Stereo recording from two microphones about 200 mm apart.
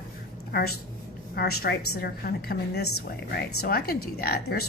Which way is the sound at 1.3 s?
50° left (ahead or behind).